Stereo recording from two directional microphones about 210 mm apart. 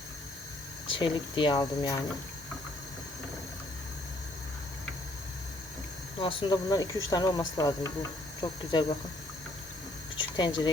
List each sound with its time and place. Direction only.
0.9 s speech: 25° left (ahead or behind)
6.1 s speech: 20° left (ahead or behind)
10.2 s speech: 20° left (ahead or behind)